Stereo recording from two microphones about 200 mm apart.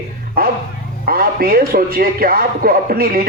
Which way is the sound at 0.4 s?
45° right (ahead or behind).